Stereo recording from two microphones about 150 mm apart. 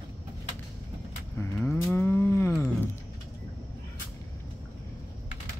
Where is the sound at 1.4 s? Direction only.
15° left (ahead or behind).